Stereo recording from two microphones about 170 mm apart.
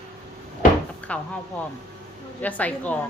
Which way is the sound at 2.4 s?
10° left (ahead or behind).